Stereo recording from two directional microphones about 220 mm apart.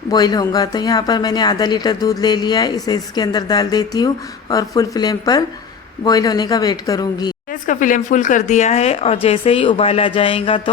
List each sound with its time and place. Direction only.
0.1 s a woman's voice: 20° left (ahead or behind)
7.5 s speech: 35° left (ahead or behind)